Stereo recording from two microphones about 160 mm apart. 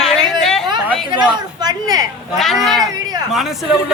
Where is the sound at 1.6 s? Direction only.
25° right (ahead or behind).